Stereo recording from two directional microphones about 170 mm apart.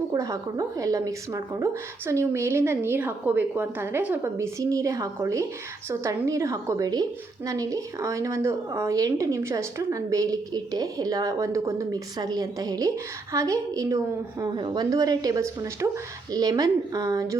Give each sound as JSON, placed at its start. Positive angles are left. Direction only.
{"t": 0.1, "sound": "a woman's voice", "side_deg": -20}